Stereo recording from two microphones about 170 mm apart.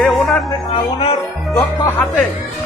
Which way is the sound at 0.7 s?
35° left (ahead or behind).